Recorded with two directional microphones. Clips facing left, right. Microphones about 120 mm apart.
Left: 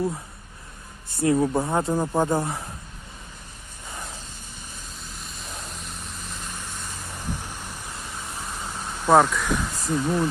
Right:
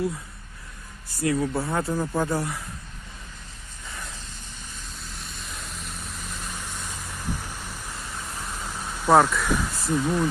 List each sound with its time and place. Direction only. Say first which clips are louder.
1.1 s speech: left 4 dB; 25° left (ahead or behind)
5.0 s a sound: left 1 dB; centre (ahead or behind)
5.6 s vehicle: even; centre (ahead or behind)
7.4 s vehicle: even; 15° left (ahead or behind)
8.3 s vehicle: left 1 dB; centre (ahead or behind)
8.7 s a sound: left 1 dB; 10° left (ahead or behind)
9.0 s speech: even; centre (ahead or behind)